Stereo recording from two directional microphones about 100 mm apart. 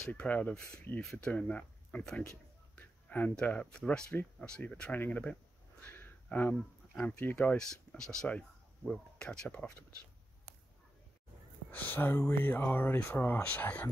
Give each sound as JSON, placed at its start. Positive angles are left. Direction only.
{"t": 0.1, "sound": "speech", "side_deg": 15}
{"t": 11.7, "sound": "speech", "side_deg": 20}